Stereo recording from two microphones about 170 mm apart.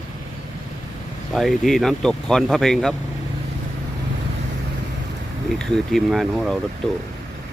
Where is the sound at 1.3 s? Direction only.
Centre (ahead or behind).